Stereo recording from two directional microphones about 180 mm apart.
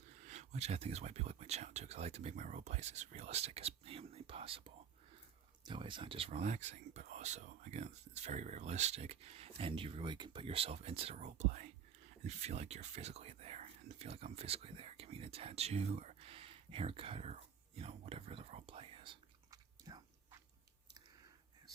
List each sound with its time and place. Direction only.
0.2 s speech: 40° right (ahead or behind); by 20.0 s 20° right (ahead or behind)